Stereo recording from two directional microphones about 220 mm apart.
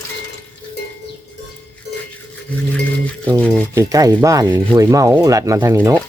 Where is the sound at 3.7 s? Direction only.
15° right (ahead or behind).